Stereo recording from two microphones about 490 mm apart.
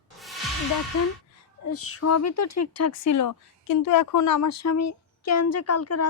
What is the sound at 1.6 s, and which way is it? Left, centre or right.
Speech, left.